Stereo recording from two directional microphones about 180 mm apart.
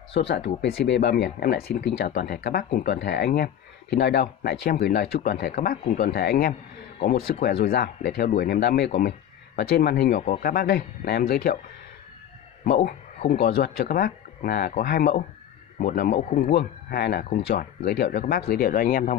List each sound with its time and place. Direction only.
0.4 s speech: 70° left (ahead or behind)
12.6 s speech: 60° left (ahead or behind)
16.2 s speech: 40° left (ahead or behind)
16.4 s speech: 60° left (ahead or behind)